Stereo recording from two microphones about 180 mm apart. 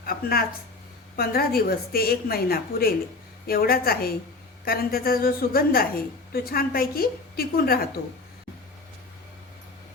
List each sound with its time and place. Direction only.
0.0 s a woman's voice: 55° left (ahead or behind)